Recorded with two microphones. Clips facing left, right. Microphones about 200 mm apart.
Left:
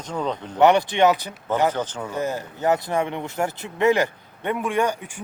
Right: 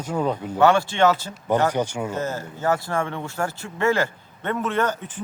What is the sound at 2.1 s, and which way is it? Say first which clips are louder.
Speech: left 1 dB; 15° left (ahead or behind).